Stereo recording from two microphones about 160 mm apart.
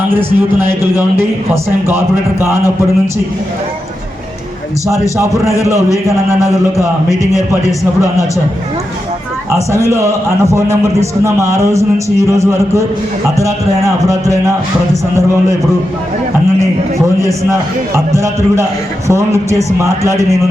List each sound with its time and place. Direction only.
0.1 s speech: 15° right (ahead or behind)
6.7 s a sound: 20° left (ahead or behind)
9.7 s a man's voice: 20° right (ahead or behind)
17.2 s a man's voice: 20° right (ahead or behind)